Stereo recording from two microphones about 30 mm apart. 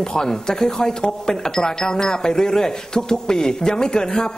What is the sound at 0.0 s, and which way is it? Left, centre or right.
Speech, left.